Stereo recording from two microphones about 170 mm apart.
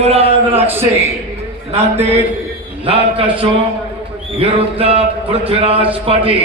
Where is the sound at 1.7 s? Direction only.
35° right (ahead or behind).